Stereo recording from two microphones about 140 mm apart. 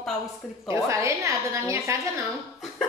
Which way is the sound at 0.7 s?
20° right (ahead or behind).